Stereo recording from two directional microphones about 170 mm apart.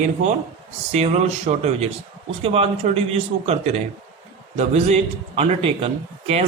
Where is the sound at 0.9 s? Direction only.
40° right (ahead or behind).